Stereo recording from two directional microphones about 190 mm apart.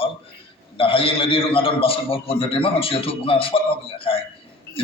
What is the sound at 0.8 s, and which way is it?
A man's voice, 30° left (ahead or behind).